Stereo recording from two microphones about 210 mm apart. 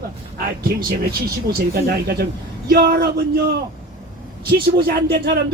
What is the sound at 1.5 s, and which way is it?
Speech, 45° right (ahead or behind).